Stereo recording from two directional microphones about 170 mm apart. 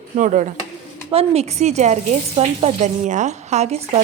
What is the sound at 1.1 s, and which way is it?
A woman's voice, 35° right (ahead or behind).